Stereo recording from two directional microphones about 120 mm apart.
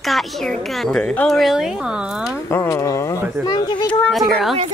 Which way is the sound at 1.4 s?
5° right (ahead or behind).